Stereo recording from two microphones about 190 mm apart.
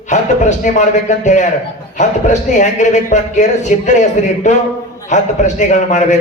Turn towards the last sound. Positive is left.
turn(degrees=40)  # may be behind; listen again after turning